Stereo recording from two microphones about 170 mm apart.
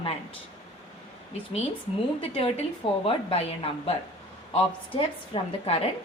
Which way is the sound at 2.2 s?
35° left (ahead or behind).